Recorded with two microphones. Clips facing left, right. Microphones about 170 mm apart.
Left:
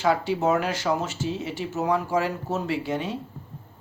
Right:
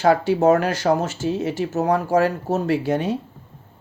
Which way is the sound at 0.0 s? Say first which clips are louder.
Right 6 dB; 50° right (ahead or behind).